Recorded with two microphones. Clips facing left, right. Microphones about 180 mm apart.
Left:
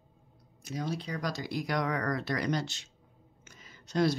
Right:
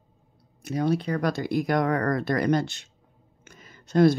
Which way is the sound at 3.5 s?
55° right (ahead or behind).